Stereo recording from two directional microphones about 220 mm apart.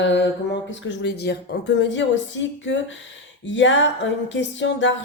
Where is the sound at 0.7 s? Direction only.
55° left (ahead or behind).